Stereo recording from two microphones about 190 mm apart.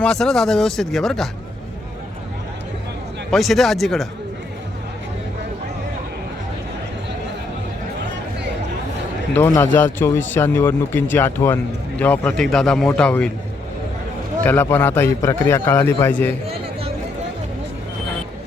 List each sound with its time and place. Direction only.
0.0 s speech: centre (ahead or behind)
3.3 s speech: centre (ahead or behind)
9.7 s speech: 10° left (ahead or behind)
14.4 s speech: 10° left (ahead or behind)